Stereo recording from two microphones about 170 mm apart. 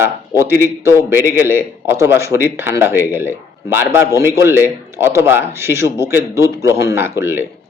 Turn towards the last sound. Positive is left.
turn(degrees=-15)  # may be behind; listen again after turning